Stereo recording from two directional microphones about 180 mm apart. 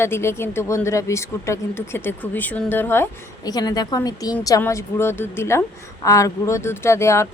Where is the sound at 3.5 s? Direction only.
20° left (ahead or behind).